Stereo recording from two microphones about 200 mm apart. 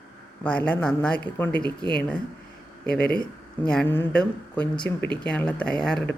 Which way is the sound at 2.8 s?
5° left (ahead or behind).